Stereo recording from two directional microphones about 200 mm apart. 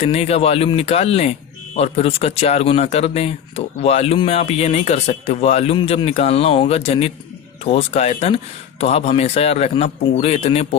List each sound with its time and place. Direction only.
0.0 s speech: 30° left (ahead or behind)